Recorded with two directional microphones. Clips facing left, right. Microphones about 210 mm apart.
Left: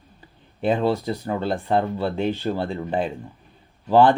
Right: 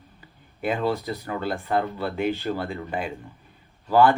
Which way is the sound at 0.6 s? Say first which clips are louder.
Left 4 dB; 30° left (ahead or behind).